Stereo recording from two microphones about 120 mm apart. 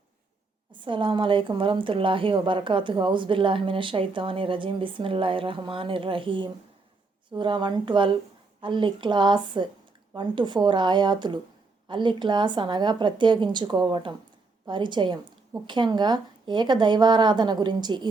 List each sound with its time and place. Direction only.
0.7 s a woman's voice: 45° right (ahead or behind)